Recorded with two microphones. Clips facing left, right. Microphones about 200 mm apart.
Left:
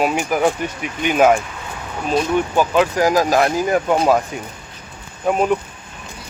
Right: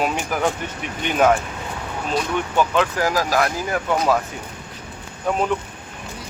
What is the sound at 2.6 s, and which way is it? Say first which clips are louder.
Speech: left 2 dB; 15° left (ahead or behind).